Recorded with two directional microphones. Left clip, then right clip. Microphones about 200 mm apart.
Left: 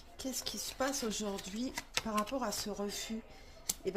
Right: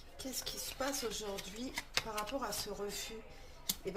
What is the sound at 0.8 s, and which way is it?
Speech, 35° left (ahead or behind).